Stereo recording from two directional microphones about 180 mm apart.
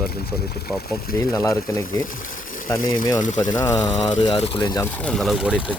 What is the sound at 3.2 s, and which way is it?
Speech, 45° left (ahead or behind).